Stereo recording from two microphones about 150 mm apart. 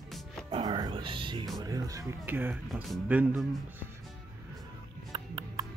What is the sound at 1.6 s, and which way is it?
Speech, 25° right (ahead or behind).